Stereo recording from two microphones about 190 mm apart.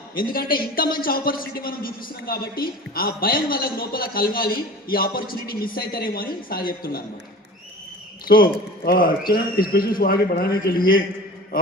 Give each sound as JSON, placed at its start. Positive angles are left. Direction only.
{"t": 0.2, "sound": "a man's voice", "side_deg": 50}
{"t": 8.3, "sound": "a man's voice", "side_deg": 50}